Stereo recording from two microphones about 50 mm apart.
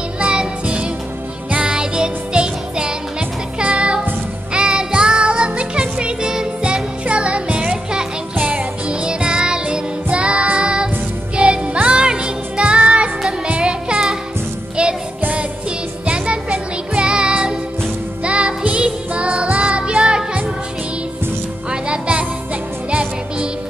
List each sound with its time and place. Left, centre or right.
0.2 s music: right
16.1 s music: right
21.6 s music: right